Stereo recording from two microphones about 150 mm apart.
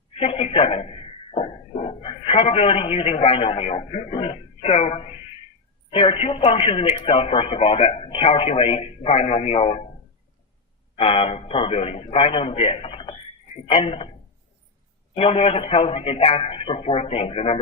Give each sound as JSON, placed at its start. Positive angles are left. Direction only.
{"t": 0.1, "sound": "a man's voice", "side_deg": 40}
{"t": 10.9, "sound": "speech", "side_deg": 40}
{"t": 15.1, "sound": "speech", "side_deg": 40}